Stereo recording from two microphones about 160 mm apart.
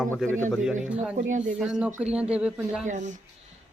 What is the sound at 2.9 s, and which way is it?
Speech, 50° right (ahead or behind).